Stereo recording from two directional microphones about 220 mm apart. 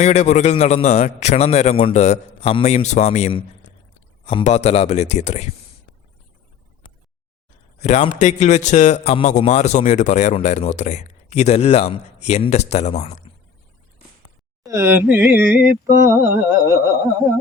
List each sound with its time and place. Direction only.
0.0 s speech: 30° left (ahead or behind)
7.8 s speech: 30° left (ahead or behind)
14.6 s music: 15° right (ahead or behind)